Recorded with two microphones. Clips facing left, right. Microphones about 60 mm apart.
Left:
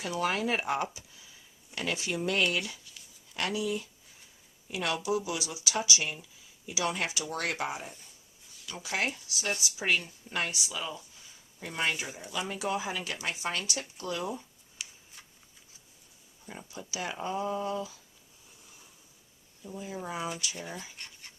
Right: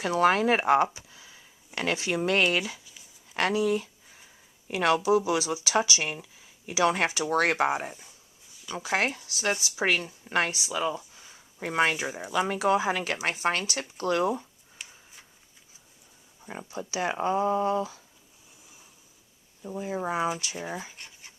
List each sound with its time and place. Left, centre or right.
0.0 s speech: right
0.9 s a sound: right
1.7 s speech: right
3.3 s speech: right
9.0 s speech: right
10.4 s speech: right
11.6 s speech: right
16.5 s speech: right
19.6 s speech: right
20.6 s speech: centre
20.9 s a sound: centre